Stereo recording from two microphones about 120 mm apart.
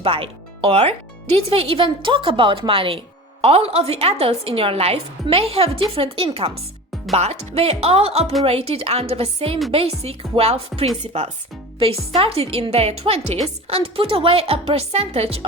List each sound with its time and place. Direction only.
0.0 s a woman's voice: 50° right (ahead or behind)